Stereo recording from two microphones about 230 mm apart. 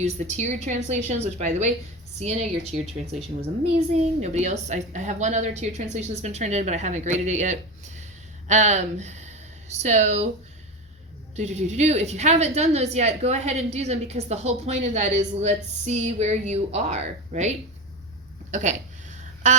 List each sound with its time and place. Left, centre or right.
0.0 s a woman's voice: right
11.3 s a woman's voice: right
18.5 s a woman's voice: right